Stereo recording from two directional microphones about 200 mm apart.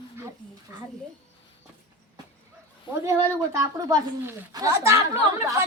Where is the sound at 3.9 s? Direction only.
15° right (ahead or behind).